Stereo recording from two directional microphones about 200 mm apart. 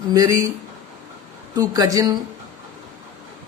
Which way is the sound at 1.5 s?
20° right (ahead or behind).